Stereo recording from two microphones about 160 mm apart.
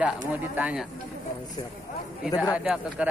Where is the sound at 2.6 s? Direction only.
5° right (ahead or behind).